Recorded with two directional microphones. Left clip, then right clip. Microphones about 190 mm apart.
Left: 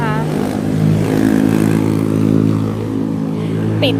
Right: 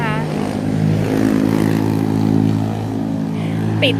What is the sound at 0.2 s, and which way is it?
Vehicle, 60° left (ahead or behind).